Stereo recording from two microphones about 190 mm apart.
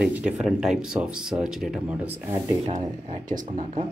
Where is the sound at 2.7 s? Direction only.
35° right (ahead or behind).